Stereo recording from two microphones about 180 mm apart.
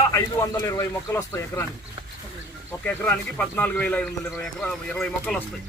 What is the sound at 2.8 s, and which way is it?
A man's voice, 10° left (ahead or behind).